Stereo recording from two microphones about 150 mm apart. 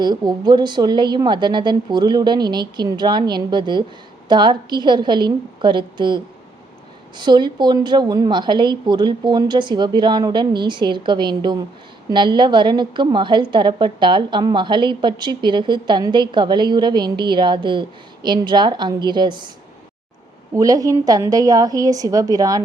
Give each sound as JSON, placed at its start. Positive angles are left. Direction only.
{"t": 0.0, "sound": "a woman's voice", "side_deg": -30}
{"t": 20.6, "sound": "a woman's voice", "side_deg": -25}